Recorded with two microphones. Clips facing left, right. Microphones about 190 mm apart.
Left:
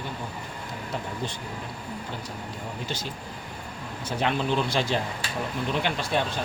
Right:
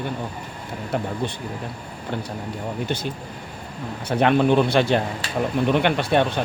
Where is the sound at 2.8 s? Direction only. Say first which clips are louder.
Right 7 dB; 60° right (ahead or behind).